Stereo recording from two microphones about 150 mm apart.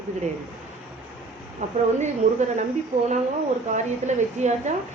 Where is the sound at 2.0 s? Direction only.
50° right (ahead or behind).